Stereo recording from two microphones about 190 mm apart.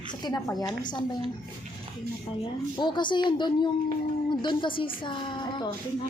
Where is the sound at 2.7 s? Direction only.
25° left (ahead or behind).